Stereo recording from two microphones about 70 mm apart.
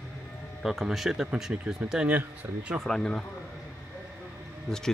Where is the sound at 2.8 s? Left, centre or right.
Centre.